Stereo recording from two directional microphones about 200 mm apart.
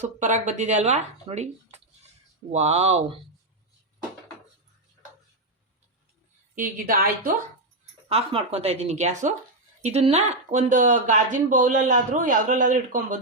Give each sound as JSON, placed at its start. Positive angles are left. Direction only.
{"t": 0.0, "sound": "speech", "side_deg": -35}
{"t": 6.6, "sound": "speech", "side_deg": -45}
{"t": 8.1, "sound": "speech", "side_deg": -30}